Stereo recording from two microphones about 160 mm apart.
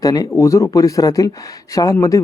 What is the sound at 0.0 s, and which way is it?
Speech, 25° left (ahead or behind).